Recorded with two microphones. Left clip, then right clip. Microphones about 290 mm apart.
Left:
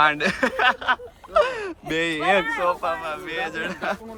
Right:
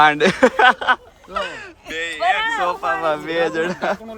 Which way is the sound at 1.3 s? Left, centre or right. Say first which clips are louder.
Left 5 dB; centre.